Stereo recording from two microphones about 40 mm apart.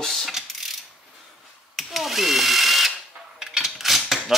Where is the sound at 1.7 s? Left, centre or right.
Centre.